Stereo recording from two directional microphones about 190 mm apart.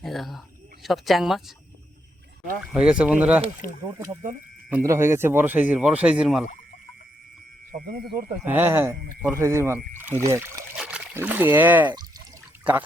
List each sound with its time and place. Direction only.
0.0 s speech: centre (ahead or behind)
2.6 s speech: 5° right (ahead or behind)
7.7 s speech: 50° right (ahead or behind)
8.4 s speech: 10° right (ahead or behind)